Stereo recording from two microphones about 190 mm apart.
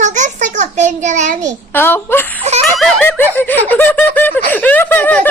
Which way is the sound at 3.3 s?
10° left (ahead or behind).